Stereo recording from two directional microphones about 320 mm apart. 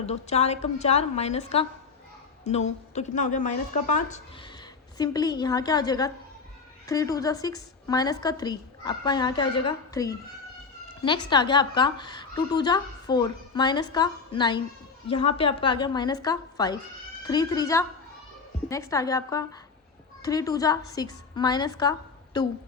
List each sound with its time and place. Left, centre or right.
0.0 s a woman's voice: centre
11.3 s a woman's voice: centre